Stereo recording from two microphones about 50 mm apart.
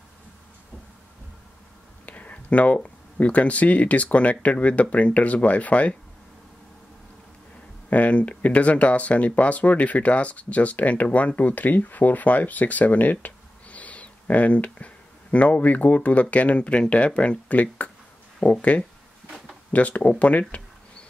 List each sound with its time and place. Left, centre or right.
2.0 s speech: left
7.9 s speech: left
19.2 s a sound: centre
19.7 s speech: left